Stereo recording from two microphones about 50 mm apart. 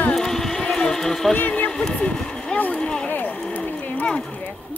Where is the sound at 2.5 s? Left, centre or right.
Left.